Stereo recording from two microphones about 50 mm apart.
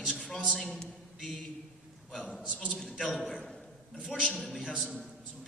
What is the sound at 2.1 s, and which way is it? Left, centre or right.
A man's voice, centre.